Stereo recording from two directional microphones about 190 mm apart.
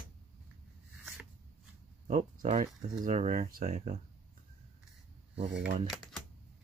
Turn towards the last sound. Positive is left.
turn(degrees=0)  # may be behind; listen again after turning